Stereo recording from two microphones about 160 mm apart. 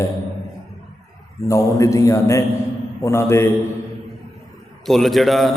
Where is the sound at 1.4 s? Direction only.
20° left (ahead or behind).